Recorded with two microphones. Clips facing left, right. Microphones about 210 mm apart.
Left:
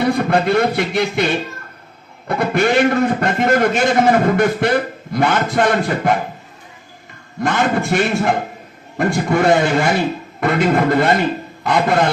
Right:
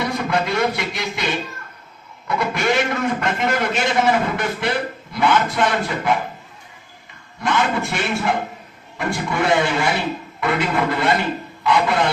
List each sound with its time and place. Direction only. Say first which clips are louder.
0.3 s a man's voice: left 5 dB; 55° left (ahead or behind)
7.4 s a man's voice: left 3 dB; 50° left (ahead or behind)